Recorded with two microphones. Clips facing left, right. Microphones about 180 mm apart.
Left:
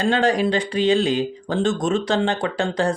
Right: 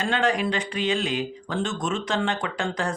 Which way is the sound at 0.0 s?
35° left (ahead or behind).